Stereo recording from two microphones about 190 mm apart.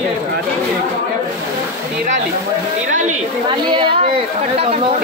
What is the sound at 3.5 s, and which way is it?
Speech, 25° right (ahead or behind).